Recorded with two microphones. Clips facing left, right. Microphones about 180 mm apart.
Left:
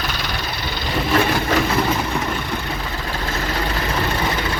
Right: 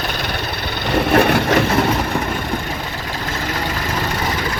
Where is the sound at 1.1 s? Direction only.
60° right (ahead or behind).